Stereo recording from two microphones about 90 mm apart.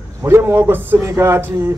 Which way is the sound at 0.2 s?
25° right (ahead or behind).